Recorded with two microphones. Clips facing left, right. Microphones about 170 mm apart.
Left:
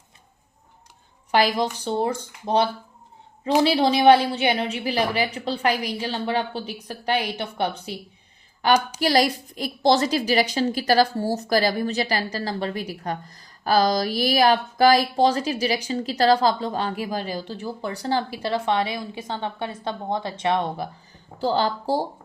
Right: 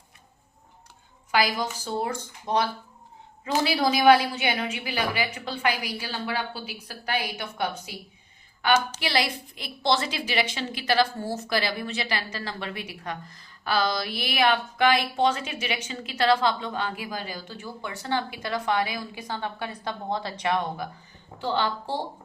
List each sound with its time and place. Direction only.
1.3 s a woman's voice: 35° left (ahead or behind)
9.0 s a woman's voice: 40° left (ahead or behind)
21.3 s a woman's voice: 40° left (ahead or behind)